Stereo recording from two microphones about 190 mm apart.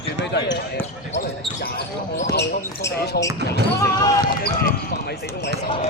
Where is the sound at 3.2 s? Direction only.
55° left (ahead or behind).